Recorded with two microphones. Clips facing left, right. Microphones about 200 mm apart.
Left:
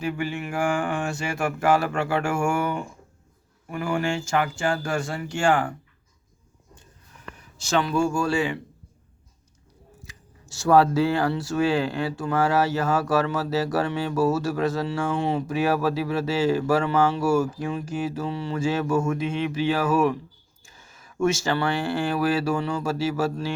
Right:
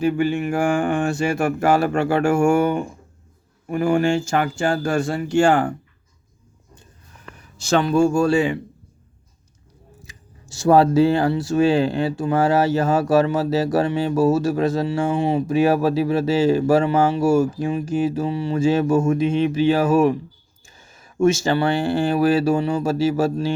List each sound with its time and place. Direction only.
0.0 s speech: 30° right (ahead or behind)
7.9 s speech: 25° right (ahead or behind)
10.1 s speech: 20° right (ahead or behind)